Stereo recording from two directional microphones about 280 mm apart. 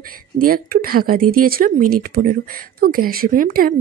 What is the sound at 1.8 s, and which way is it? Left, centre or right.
Speech, right.